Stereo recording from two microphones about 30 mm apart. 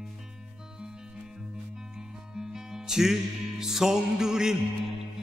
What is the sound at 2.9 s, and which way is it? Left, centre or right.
Music, centre.